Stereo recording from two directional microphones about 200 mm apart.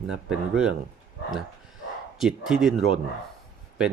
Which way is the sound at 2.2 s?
Centre (ahead or behind).